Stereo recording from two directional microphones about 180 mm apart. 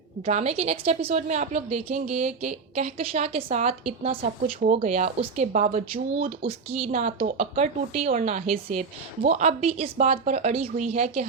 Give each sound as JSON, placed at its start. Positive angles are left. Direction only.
{"t": 0.3, "sound": "a woman's voice", "side_deg": -40}
{"t": 4.4, "sound": "a woman's voice", "side_deg": -50}